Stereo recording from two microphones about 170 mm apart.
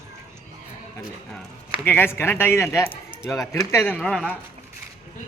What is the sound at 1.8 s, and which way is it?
Speech, 10° left (ahead or behind).